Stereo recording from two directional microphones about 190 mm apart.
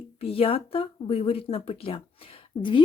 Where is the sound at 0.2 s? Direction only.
30° left (ahead or behind).